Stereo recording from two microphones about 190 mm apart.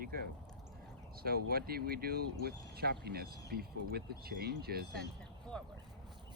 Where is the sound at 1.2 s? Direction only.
50° right (ahead or behind).